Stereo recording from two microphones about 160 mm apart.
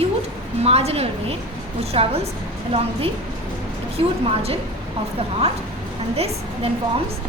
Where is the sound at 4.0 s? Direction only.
35° right (ahead or behind).